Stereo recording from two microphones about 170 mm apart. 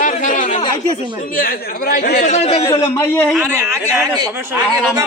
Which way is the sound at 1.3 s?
55° left (ahead or behind).